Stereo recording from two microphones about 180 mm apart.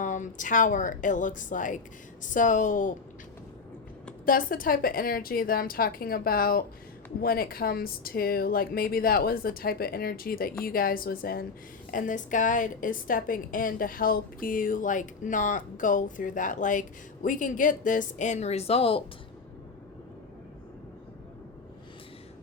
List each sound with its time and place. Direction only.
0.0 s a woman's voice: 45° left (ahead or behind)
4.3 s a woman's voice: 50° left (ahead or behind); by 19.0 s 30° left (ahead or behind)